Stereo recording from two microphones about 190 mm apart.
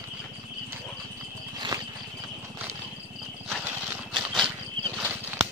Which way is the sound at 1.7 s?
20° right (ahead or behind).